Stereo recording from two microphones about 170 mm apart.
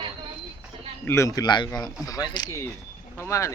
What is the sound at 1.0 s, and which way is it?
Speech, 15° left (ahead or behind).